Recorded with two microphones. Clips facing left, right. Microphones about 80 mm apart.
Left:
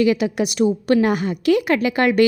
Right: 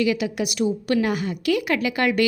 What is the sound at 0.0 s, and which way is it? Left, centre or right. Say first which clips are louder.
A woman's voice: left 5 dB; left.